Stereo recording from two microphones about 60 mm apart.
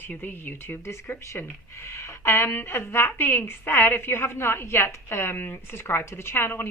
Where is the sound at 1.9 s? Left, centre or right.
Left.